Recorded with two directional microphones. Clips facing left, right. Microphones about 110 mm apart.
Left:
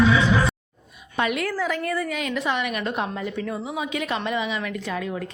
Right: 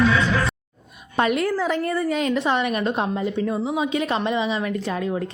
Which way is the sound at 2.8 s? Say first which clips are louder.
Right 4 dB; 25° right (ahead or behind).